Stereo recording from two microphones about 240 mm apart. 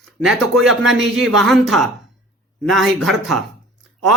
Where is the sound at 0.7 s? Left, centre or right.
Centre.